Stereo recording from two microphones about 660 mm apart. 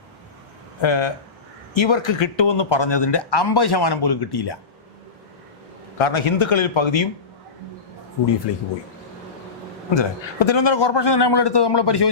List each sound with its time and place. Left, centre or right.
0.8 s a man's voice: left
6.0 s a man's voice: left
8.5 s speech: left
9.9 s speech: left